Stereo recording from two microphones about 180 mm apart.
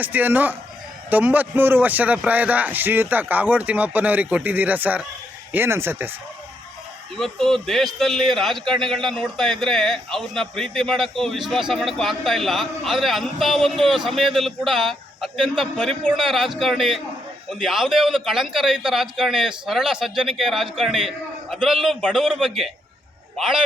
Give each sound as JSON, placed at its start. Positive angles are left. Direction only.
{"t": 0.0, "sound": "speech", "side_deg": -10}
{"t": 7.2, "sound": "a man's voice", "side_deg": 0}